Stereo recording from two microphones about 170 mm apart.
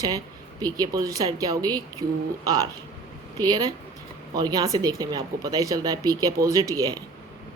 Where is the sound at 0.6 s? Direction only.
20° right (ahead or behind).